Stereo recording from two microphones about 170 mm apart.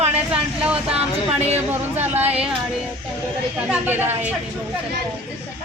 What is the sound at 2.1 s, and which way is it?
Speech, 10° right (ahead or behind).